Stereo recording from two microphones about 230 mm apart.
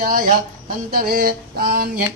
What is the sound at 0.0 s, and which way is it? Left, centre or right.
Speech, right.